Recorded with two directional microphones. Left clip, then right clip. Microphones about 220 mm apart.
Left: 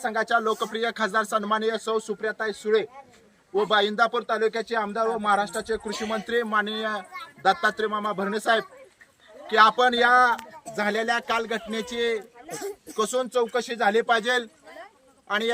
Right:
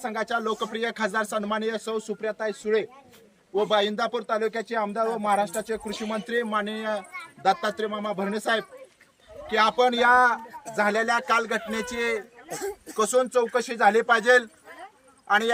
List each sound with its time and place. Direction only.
0.0 s a man's voice: 5° left (ahead or behind)
12.5 s speech: 20° right (ahead or behind)
13.0 s a man's voice: 5° left (ahead or behind)